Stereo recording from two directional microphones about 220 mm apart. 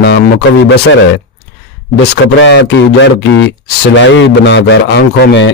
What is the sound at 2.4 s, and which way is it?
A man's voice, 55° left (ahead or behind).